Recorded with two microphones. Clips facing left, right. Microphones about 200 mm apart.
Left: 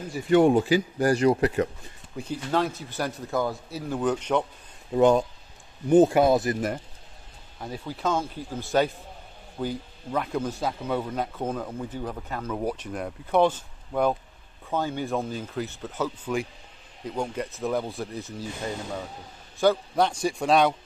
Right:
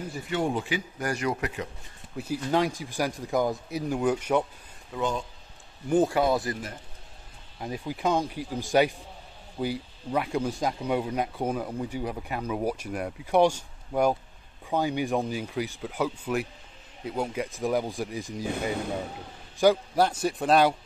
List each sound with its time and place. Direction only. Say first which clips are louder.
0.3 s speech: left 10 dB; 60° left (ahead or behind)
0.6 s speech: left 9 dB; 35° left (ahead or behind)
2.1 s speech: right 1 dB; 10° right (ahead or behind)
5.9 s speech: left 5 dB; 20° left (ahead or behind)
7.6 s a man's voice: right 1 dB; 15° right (ahead or behind)